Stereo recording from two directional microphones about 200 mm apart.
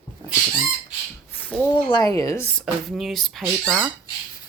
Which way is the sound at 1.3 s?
10° left (ahead or behind).